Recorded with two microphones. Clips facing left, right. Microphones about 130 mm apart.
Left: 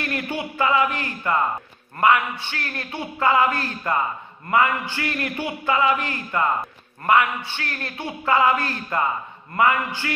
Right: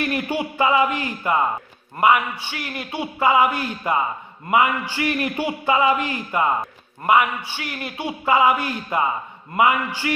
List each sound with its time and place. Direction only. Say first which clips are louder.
0.0 s a man's voice: right 4 dB; 15° right (ahead or behind)